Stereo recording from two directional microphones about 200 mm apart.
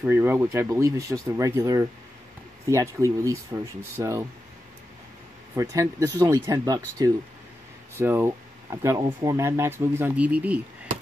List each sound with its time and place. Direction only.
0.0 s speech: 10° right (ahead or behind)
5.6 s speech: 15° right (ahead or behind)